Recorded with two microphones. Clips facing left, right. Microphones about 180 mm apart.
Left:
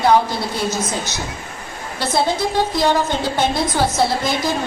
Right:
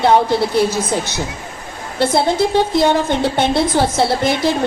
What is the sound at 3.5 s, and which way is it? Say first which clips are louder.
Speech: right 4 dB; 25° right (ahead or behind).